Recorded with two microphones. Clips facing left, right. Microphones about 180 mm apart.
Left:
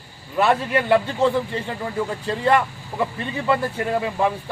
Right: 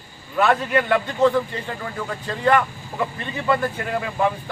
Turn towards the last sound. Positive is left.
turn(degrees=25)  # may be behind; listen again after turning